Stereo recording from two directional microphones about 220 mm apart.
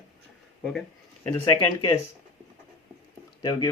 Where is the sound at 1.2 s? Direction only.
15° left (ahead or behind).